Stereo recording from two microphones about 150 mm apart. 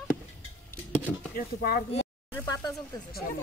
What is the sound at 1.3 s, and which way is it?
Speech, 90° left.